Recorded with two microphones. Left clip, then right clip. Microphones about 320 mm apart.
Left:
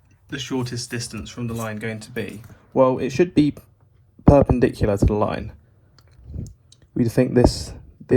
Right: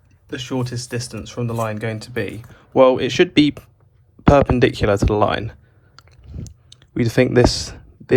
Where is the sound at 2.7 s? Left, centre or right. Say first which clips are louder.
Right 5 dB; left.